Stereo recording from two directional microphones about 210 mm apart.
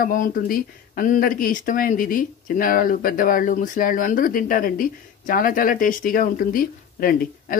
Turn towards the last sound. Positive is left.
turn(degrees=45)  # may be behind; listen again after turning